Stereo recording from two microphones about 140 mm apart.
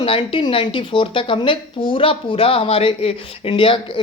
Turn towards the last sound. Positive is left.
turn(degrees=40)  # may be behind; listen again after turning